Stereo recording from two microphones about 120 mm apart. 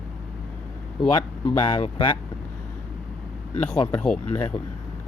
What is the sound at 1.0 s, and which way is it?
Speech, 45° left (ahead or behind).